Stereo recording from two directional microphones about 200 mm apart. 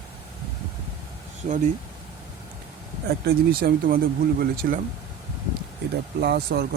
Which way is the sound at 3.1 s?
50° right (ahead or behind).